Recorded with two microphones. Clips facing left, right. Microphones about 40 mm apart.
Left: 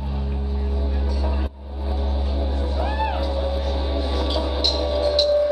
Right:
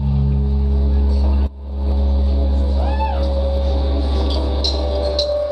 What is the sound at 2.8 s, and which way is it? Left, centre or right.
Music, centre.